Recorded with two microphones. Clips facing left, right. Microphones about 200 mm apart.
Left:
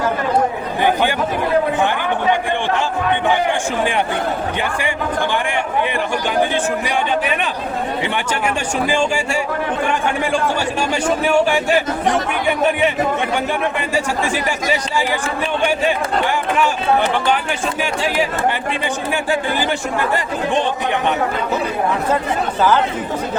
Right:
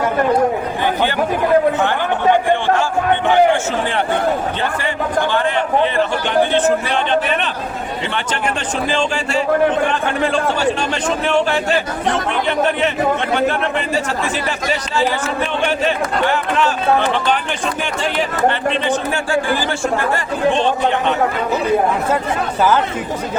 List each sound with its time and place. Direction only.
3.2 s a sound: 15° left (ahead or behind)
4.6 s a man's voice: 15° left (ahead or behind)
6.5 s a man's voice: 10° left (ahead or behind)
8.9 s a man's voice: 10° left (ahead or behind)
18.0 s a man's voice: 10° left (ahead or behind)